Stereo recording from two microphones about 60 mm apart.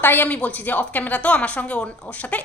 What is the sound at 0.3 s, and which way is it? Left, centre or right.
A woman's voice, left.